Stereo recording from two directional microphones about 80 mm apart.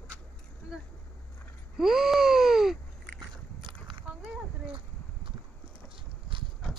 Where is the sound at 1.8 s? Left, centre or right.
Centre.